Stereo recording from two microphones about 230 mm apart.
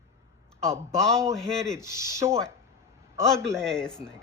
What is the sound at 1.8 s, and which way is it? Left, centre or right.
Speech, centre.